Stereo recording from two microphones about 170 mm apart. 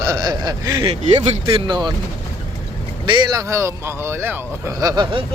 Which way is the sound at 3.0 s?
25° right (ahead or behind).